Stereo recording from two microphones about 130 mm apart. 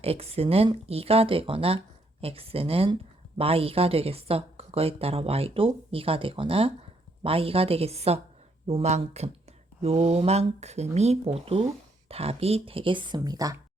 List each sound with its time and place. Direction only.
0.0 s speech: 50° right (ahead or behind); by 13.6 s 25° right (ahead or behind)